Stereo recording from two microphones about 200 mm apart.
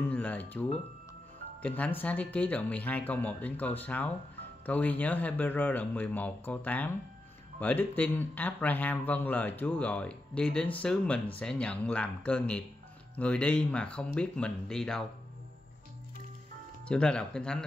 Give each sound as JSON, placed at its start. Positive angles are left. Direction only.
{"t": 0.1, "sound": "speech", "side_deg": 5}
{"t": 1.8, "sound": "a man's voice", "side_deg": 10}
{"t": 16.8, "sound": "speech", "side_deg": 5}